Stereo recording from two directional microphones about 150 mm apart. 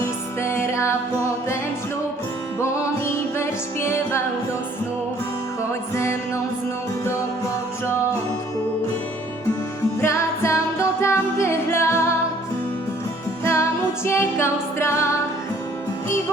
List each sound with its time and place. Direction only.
0.4 s music: 20° left (ahead or behind)
3.3 s music: 20° left (ahead or behind)
6.0 s music: 20° left (ahead or behind)
10.0 s music: 20° left (ahead or behind)
13.4 s music: 20° left (ahead or behind)